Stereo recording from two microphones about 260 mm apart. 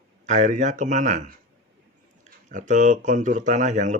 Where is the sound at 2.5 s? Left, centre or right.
Right.